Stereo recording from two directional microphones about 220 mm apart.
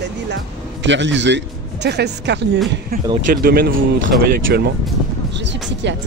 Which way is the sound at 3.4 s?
45° right (ahead or behind).